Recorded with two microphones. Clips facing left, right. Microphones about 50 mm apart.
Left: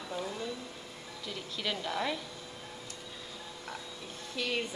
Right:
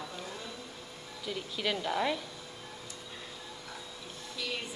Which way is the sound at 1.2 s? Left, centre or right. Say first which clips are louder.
Right 3 dB; centre.